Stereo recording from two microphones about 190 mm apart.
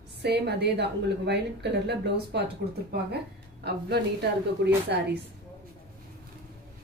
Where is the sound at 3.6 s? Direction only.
60° right (ahead or behind).